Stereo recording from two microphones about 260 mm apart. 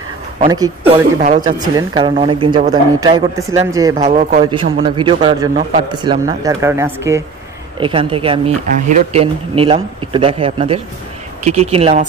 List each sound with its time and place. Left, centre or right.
0.5 s speech: centre
3.9 s speech: right